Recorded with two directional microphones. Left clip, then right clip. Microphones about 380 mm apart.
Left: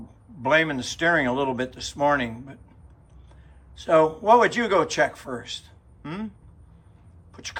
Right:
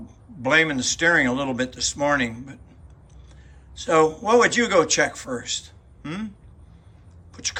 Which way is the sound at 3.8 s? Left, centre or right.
Centre.